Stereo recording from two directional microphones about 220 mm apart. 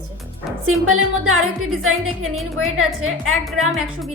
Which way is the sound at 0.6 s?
70° right (ahead or behind).